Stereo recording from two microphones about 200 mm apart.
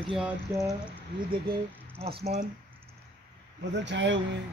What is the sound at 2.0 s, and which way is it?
Speech, 35° right (ahead or behind).